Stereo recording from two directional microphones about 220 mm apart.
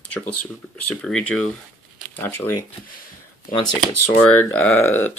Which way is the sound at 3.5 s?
40° left (ahead or behind).